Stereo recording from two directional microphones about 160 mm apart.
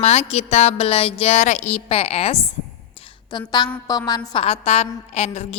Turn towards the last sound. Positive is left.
turn(degrees=40)  # may be behind; listen again after turning